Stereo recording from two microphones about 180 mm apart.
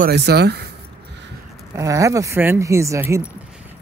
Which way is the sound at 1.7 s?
15° right (ahead or behind).